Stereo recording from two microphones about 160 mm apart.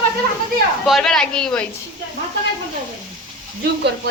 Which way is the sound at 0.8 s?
Centre (ahead or behind).